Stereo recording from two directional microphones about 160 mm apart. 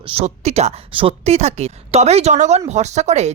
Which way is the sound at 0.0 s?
35° right (ahead or behind).